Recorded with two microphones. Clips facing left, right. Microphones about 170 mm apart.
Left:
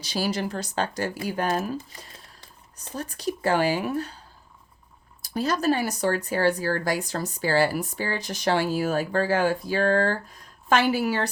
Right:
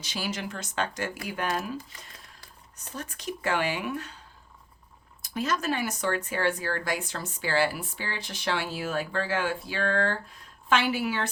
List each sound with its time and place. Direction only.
0.0 s speech: 35° left (ahead or behind)
5.2 s speech: 35° left (ahead or behind)